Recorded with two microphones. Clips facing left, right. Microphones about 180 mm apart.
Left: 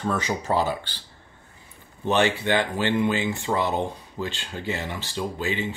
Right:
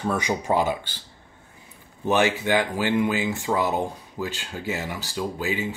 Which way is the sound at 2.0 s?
10° right (ahead or behind).